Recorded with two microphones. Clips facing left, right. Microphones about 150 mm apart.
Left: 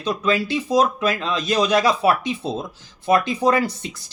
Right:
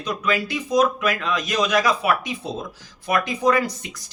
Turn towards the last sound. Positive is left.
turn(degrees=30)  # may be behind; listen again after turning